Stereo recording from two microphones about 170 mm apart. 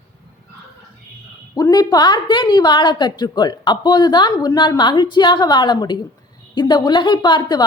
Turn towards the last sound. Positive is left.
turn(degrees=25)  # may be behind; listen again after turning